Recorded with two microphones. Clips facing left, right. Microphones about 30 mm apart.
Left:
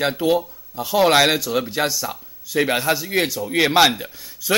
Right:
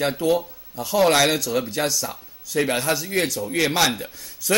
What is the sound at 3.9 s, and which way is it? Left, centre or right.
Speech, centre.